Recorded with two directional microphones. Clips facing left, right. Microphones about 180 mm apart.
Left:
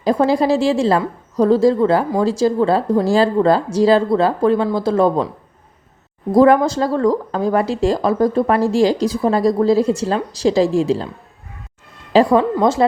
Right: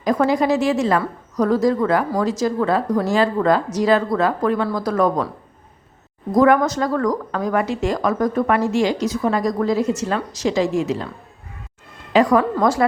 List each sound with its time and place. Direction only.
0.0 s a woman's voice: 30° left (ahead or behind)
6.3 s speech: 30° left (ahead or behind)
12.1 s a woman's voice: 25° left (ahead or behind)